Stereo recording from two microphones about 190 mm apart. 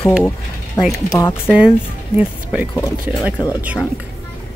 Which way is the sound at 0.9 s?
15° left (ahead or behind).